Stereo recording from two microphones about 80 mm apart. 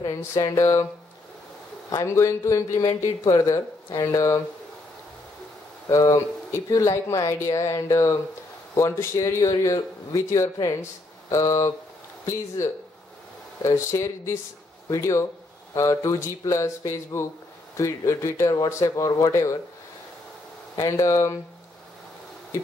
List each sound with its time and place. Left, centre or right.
0.2 s a man's voice: left
2.0 s a man's voice: left
2.8 s speech: left
5.9 s a man's voice: left
20.7 s speech: left